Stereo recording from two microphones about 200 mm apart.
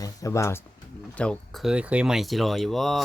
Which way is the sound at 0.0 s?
15° left (ahead or behind).